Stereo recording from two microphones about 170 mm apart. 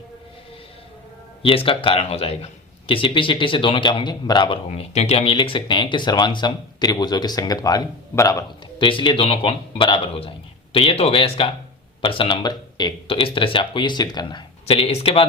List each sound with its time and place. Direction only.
1.4 s a man's voice: 30° left (ahead or behind)